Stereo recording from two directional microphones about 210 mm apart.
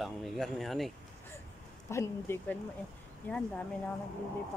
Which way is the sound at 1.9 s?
10° left (ahead or behind).